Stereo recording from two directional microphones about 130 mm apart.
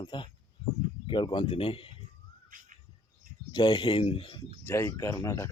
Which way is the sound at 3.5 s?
35° left (ahead or behind).